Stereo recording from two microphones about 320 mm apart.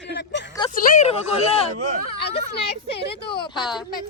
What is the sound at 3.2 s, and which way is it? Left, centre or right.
Speech, centre.